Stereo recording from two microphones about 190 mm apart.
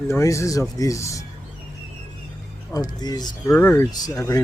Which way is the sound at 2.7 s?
20° left (ahead or behind).